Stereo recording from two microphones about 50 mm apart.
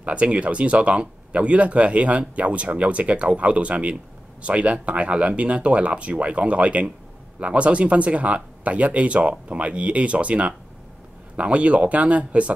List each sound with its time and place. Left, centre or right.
0.0 s speech: right